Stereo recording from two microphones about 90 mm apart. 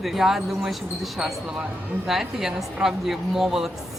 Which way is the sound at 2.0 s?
5° right (ahead or behind).